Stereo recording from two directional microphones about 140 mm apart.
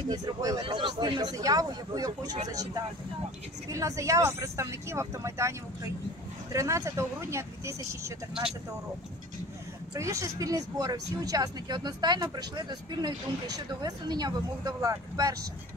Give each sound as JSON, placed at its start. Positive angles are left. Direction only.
{"t": 0.1, "sound": "speech", "side_deg": -25}
{"t": 6.5, "sound": "speech", "side_deg": -25}
{"t": 9.9, "sound": "speech", "side_deg": -20}